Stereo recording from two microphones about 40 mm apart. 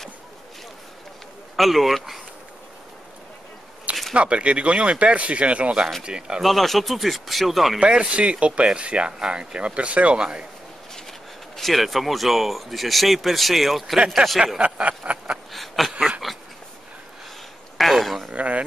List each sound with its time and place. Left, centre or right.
1.6 s speech: centre
4.1 s speech: right
6.4 s speech: centre
7.8 s speech: right
10.1 s speech: right
11.1 s speech: centre
13.9 s speech: centre
14.6 s speech: right
15.5 s a sound: centre
16.3 s dog: centre
17.7 s a sound: centre
18.3 s dishes: right